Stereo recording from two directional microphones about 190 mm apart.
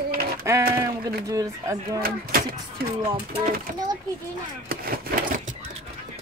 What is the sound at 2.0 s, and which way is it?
Speech, 50° right (ahead or behind).